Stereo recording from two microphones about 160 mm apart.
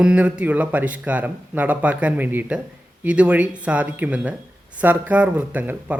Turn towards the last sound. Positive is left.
turn(degrees=-10)  # may be behind; listen again after turning